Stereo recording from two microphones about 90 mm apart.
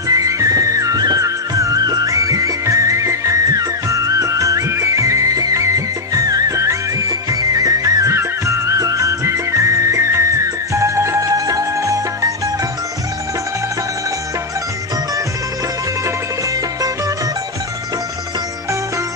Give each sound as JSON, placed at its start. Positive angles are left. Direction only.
{"t": 0.1, "sound": "music", "side_deg": -40}